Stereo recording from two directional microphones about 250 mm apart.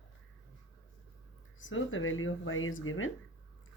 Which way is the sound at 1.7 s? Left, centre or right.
Left.